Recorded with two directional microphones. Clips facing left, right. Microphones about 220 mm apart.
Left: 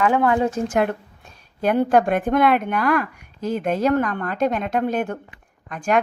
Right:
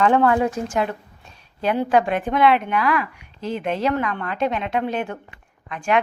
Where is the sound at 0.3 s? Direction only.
25° left (ahead or behind).